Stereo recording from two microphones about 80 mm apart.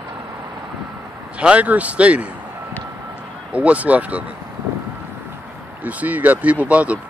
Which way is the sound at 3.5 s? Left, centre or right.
Centre.